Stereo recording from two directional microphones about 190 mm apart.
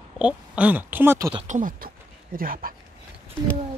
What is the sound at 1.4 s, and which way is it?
Speech, 45° right (ahead or behind).